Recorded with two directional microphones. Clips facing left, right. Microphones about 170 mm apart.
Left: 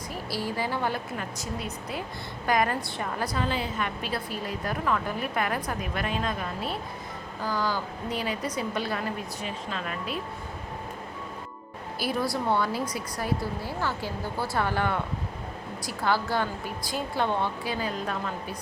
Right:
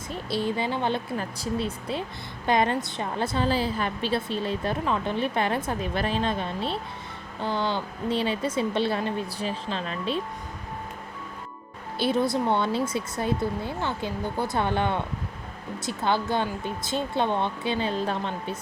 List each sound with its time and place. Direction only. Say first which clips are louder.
0.1 s a woman's voice: right 5 dB; 20° right (ahead or behind)
11.9 s a woman's voice: right 5 dB; 25° right (ahead or behind)